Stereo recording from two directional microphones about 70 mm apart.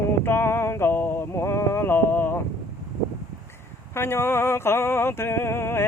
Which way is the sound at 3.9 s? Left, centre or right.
Left.